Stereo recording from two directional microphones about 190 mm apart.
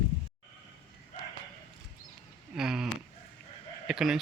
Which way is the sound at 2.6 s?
5° right (ahead or behind).